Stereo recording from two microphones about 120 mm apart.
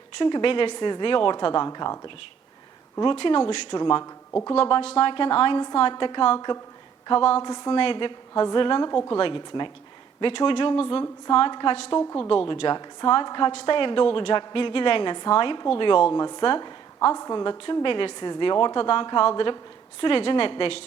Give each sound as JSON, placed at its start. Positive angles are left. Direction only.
{"t": 0.2, "sound": "a woman's voice", "side_deg": 45}
{"t": 4.0, "sound": "a woman's voice", "side_deg": 20}
{"t": 4.5, "sound": "a woman's voice", "side_deg": 50}
{"t": 8.3, "sound": "a woman's voice", "side_deg": 30}
{"t": 8.9, "sound": "a woman's voice", "side_deg": 30}
{"t": 9.1, "sound": "a woman's voice", "side_deg": 45}
{"t": 13.5, "sound": "a woman's voice", "side_deg": 50}